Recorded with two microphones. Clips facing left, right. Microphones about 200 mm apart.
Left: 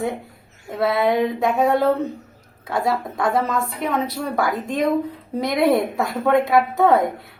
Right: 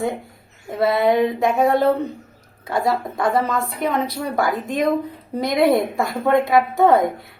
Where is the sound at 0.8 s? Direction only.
Centre (ahead or behind).